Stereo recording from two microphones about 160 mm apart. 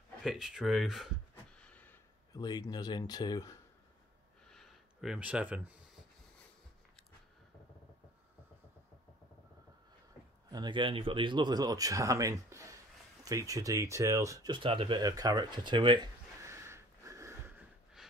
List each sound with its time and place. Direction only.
0.2 s speech: centre (ahead or behind)
1.3 s a sound: 10° left (ahead or behind)
2.3 s speech: 25° left (ahead or behind)
4.5 s a sound: centre (ahead or behind)
10.5 s speech: 30° right (ahead or behind)
16.4 s snort: 15° right (ahead or behind)